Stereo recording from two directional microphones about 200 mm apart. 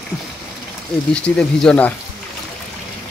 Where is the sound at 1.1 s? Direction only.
5° left (ahead or behind).